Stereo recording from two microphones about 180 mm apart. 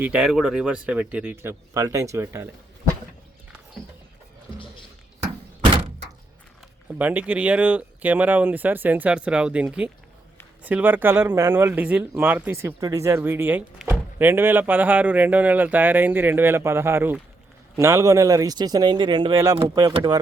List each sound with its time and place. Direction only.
0.0 s speech: 5° right (ahead or behind)
7.0 s speech: 10° right (ahead or behind)